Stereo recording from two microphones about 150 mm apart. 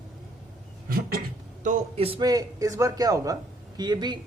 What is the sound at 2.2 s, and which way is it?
A man's voice, 25° right (ahead or behind).